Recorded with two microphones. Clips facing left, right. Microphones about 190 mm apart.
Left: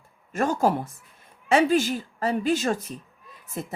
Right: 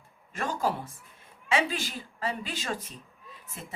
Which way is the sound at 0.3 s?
45° left (ahead or behind).